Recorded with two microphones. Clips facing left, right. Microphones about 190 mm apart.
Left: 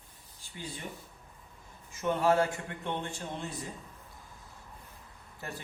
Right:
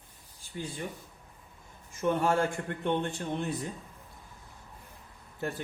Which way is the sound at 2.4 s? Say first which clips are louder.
Right 1 dB; 55° right (ahead or behind).